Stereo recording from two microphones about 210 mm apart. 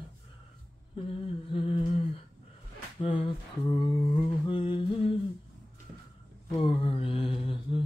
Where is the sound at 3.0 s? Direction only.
25° left (ahead or behind).